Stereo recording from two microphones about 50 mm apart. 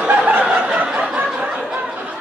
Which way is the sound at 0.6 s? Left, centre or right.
Right.